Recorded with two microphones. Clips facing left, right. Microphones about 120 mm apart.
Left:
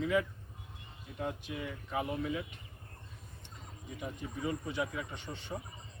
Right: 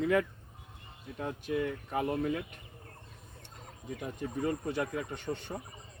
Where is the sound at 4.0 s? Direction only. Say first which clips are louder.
Right 4 dB; 55° right (ahead or behind).